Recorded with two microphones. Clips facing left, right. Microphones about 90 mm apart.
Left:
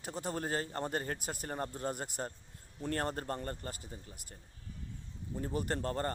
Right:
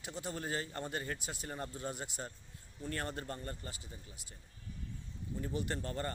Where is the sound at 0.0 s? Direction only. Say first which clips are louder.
Left 4 dB; 45° left (ahead or behind).